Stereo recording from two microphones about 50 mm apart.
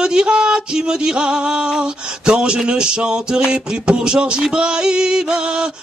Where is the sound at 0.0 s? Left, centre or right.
Centre.